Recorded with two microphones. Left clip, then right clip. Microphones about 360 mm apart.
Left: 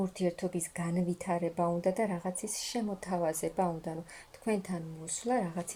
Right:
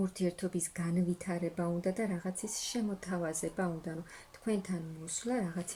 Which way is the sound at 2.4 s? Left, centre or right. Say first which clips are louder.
Left 2 dB; centre.